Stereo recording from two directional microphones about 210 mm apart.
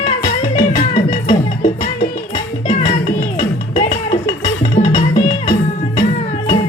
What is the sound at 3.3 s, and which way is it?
Music, 35° left (ahead or behind).